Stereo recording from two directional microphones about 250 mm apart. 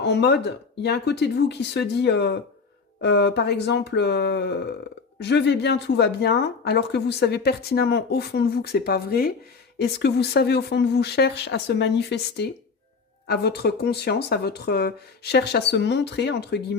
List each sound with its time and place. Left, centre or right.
0.0 s a woman's voice: left